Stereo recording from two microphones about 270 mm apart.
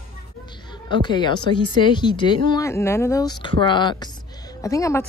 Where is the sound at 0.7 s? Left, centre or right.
Centre.